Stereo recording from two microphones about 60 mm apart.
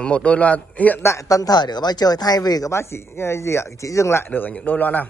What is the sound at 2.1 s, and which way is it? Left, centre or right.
Speech, left.